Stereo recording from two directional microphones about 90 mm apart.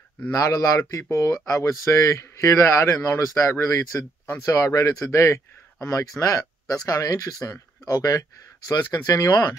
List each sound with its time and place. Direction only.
0.3 s speech: 40° left (ahead or behind)